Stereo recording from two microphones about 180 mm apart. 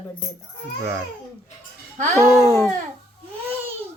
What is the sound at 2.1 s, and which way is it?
Speech, 15° left (ahead or behind).